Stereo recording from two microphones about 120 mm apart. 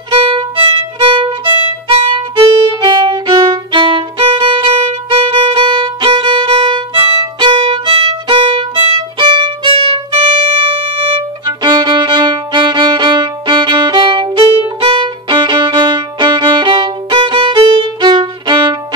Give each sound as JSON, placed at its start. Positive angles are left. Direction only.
{"t": 0.1, "sound": "violin", "side_deg": -45}
{"t": 10.1, "sound": "music", "side_deg": -45}
{"t": 11.4, "sound": "violin", "side_deg": -35}